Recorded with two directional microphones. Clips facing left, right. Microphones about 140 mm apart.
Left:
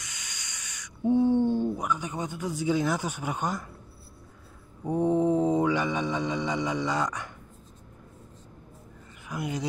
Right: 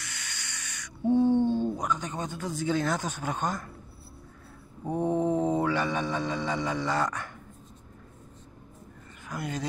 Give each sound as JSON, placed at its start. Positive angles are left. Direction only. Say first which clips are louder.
{"t": 0.0, "sound": "a sound", "louder": "right 3 dB", "side_deg": 15}
{"t": 4.8, "sound": "mantra", "louder": "left 3 dB", "side_deg": 15}
{"t": 9.3, "sound": "speech", "louder": "left 2 dB", "side_deg": 15}